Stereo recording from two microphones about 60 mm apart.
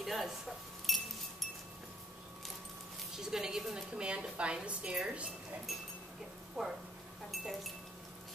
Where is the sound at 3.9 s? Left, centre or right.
Centre.